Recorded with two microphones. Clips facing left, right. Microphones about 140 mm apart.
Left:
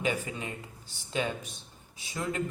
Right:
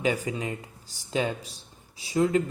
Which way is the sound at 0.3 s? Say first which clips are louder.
Right 6 dB; 35° right (ahead or behind).